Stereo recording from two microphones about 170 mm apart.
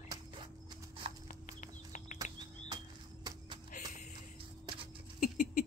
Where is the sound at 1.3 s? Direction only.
50° left (ahead or behind).